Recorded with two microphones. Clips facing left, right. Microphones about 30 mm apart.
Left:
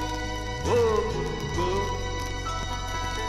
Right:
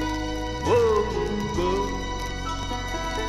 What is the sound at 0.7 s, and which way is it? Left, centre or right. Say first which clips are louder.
Music: right 3 dB; right.